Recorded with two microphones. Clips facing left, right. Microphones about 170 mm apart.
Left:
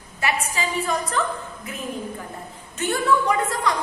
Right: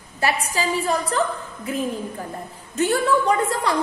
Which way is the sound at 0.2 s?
35° right (ahead or behind).